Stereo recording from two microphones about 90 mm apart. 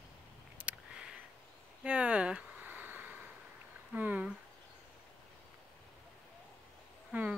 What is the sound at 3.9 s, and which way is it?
Speech, 20° right (ahead or behind).